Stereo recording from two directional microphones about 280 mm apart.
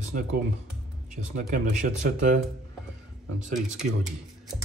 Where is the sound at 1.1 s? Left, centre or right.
Right.